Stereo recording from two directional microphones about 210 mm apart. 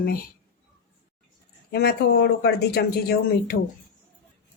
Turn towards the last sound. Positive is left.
turn(degrees=50)  # may be behind; listen again after turning